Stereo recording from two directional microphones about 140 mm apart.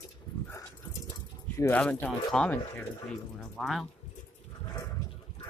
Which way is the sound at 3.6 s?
Centre (ahead or behind).